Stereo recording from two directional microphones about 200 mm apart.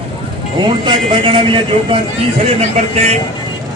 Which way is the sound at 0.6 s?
25° right (ahead or behind).